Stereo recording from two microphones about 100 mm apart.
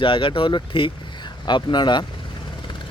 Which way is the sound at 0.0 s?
60° left (ahead or behind).